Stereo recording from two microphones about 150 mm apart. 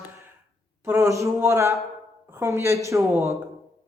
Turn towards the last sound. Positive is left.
turn(degrees=-20)  # may be behind; listen again after turning